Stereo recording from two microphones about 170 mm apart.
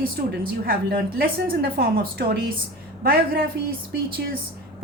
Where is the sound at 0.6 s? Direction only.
60° right (ahead or behind).